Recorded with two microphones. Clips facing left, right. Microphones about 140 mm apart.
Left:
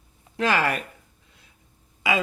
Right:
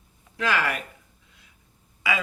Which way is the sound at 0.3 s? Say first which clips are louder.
Left 3 dB; 35° left (ahead or behind).